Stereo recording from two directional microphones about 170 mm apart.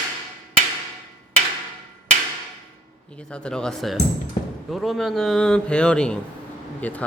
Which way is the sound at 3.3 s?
5° left (ahead or behind).